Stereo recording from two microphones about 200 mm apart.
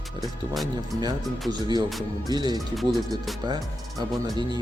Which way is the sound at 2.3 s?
20° right (ahead or behind).